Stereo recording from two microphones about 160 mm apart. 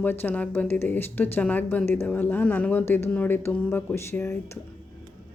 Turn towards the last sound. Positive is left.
turn(degrees=15)  # may be behind; listen again after turning